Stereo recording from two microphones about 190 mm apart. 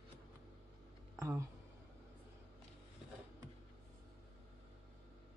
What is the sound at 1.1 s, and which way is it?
Speech, 15° right (ahead or behind).